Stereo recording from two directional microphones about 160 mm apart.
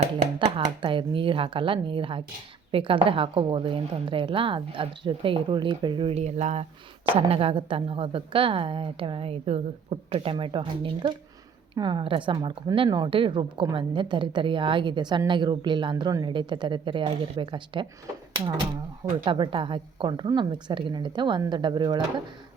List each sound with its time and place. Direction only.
0.3 s a woman's voice: 35° right (ahead or behind)
19.2 s a woman's voice: 30° right (ahead or behind)